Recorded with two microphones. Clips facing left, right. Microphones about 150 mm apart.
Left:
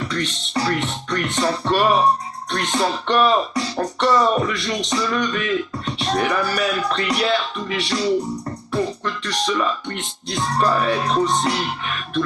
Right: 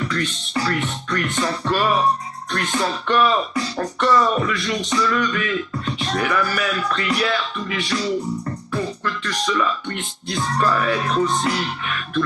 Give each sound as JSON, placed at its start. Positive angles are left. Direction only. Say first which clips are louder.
{"t": 0.0, "sound": "music", "louder": "right 1 dB", "side_deg": 35}